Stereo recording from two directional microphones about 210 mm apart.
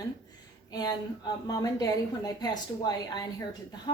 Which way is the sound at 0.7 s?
20° left (ahead or behind).